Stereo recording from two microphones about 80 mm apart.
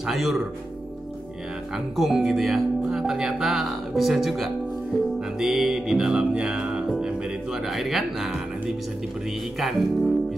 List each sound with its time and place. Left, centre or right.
0.0 s speech: centre
2.0 s speech: centre
5.4 s music: centre
9.6 s speech: centre